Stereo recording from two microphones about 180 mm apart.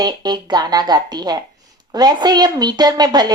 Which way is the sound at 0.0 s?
25° right (ahead or behind).